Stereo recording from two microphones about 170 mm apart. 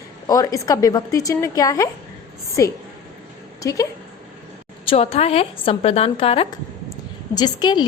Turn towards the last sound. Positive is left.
turn(degrees=25)  # may be behind; listen again after turning